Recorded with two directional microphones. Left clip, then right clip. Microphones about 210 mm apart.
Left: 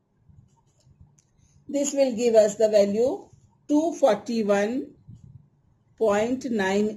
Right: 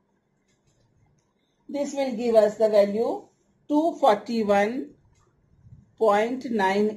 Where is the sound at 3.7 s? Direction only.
55° left (ahead or behind).